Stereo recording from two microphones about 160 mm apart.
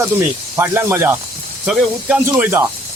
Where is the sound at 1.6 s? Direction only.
5° right (ahead or behind).